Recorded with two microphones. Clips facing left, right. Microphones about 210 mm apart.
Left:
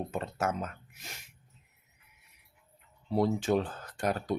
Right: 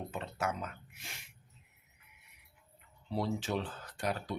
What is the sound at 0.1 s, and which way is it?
Speech, 45° left (ahead or behind).